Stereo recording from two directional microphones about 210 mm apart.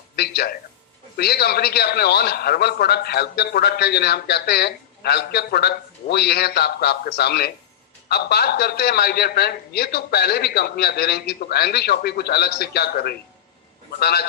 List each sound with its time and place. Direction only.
0.2 s a man's voice: 50° left (ahead or behind)